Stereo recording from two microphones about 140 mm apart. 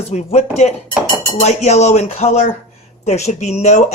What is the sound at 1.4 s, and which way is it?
Speech, 55° left (ahead or behind).